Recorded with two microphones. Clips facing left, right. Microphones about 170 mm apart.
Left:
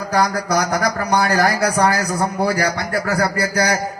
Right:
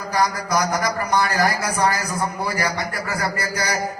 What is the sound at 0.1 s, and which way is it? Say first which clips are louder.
A man's voice: left 3 dB; 75° left (ahead or behind).